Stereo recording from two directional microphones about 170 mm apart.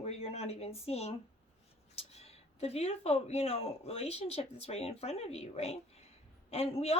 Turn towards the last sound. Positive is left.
turn(degrees=35)  # may be behind; listen again after turning